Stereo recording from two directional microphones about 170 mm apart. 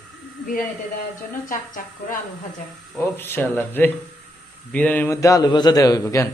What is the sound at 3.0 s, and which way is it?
A man's voice, 10° left (ahead or behind).